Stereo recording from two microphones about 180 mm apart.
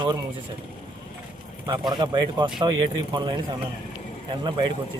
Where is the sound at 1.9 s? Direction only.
25° right (ahead or behind).